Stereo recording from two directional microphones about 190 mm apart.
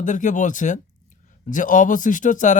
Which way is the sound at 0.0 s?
40° left (ahead or behind).